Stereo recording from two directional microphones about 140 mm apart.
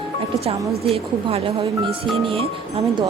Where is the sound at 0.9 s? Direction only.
40° right (ahead or behind).